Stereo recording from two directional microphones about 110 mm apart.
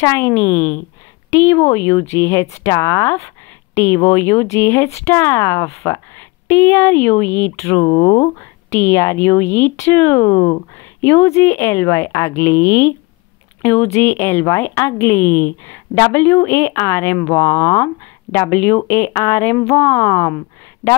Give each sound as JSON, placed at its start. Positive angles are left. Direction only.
{"t": 0.0, "sound": "speech", "side_deg": 25}
{"t": 7.8, "sound": "speech", "side_deg": 50}
{"t": 8.7, "sound": "speech", "side_deg": 25}
{"t": 10.2, "sound": "speech", "side_deg": 30}
{"t": 11.0, "sound": "speech", "side_deg": 20}